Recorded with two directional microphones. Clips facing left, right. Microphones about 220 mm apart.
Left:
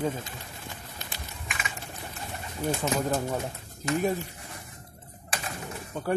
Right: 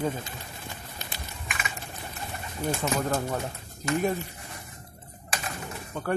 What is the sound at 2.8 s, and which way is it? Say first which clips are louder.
Speech: even; 20° left (ahead or behind).